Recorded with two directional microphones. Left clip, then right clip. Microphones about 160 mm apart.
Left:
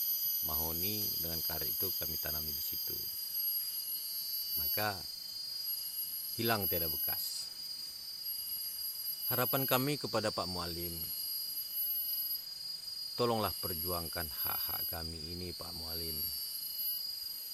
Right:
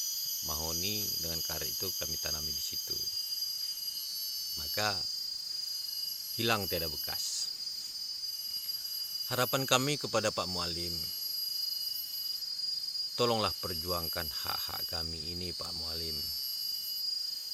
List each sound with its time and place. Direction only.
6.4 s speech: 10° right (ahead or behind)
9.3 s speech: 15° right (ahead or behind)
13.1 s speech: 10° right (ahead or behind)